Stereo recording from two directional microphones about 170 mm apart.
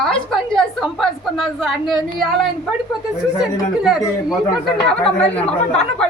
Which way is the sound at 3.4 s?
5° right (ahead or behind).